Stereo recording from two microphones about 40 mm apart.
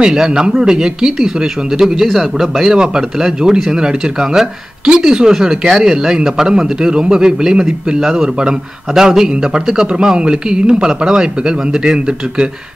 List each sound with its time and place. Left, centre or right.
0.0 s a man's voice: centre
2.1 s speech: centre
2.7 s a man's voice: centre